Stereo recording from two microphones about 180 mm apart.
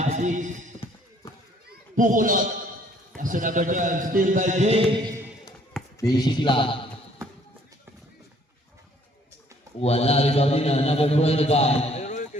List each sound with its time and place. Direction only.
0.0 s a sound: 40° right (ahead or behind)
2.0 s a man's voice: 45° right (ahead or behind)
6.0 s speech: 20° left (ahead or behind)
9.8 s a man's voice: 35° left (ahead or behind)